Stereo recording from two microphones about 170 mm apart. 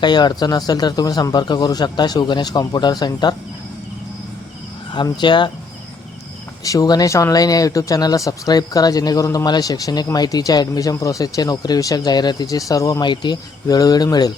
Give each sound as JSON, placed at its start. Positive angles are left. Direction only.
{"t": 0.0, "sound": "speech", "side_deg": 25}
{"t": 4.9, "sound": "speech", "side_deg": 25}
{"t": 6.7, "sound": "speech", "side_deg": 20}